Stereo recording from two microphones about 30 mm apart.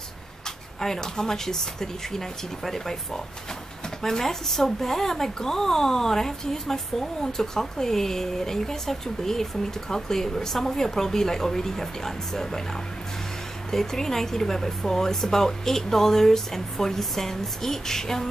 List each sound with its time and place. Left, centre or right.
0.7 s speech: centre
13.7 s speech: centre